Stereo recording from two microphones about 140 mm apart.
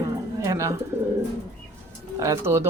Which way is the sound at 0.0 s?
25° right (ahead or behind).